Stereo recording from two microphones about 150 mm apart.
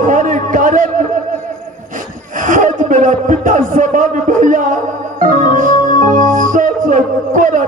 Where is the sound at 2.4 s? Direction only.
60° right (ahead or behind).